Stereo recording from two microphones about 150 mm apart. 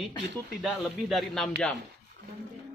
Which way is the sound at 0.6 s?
Centre (ahead or behind).